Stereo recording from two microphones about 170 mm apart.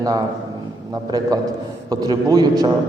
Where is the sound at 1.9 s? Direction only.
20° right (ahead or behind).